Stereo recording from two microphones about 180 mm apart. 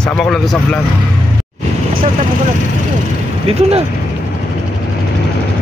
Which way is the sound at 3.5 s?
30° right (ahead or behind).